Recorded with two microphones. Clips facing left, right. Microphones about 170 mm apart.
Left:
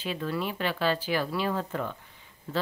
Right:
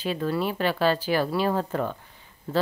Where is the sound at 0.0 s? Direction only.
40° right (ahead or behind).